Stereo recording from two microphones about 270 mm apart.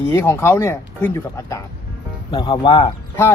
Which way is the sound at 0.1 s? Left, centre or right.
Centre.